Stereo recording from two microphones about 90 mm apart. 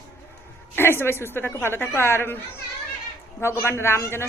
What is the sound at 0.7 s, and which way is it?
A woman's voice, 25° left (ahead or behind).